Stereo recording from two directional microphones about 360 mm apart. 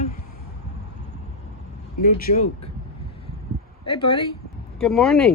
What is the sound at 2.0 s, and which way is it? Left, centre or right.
Speech, left.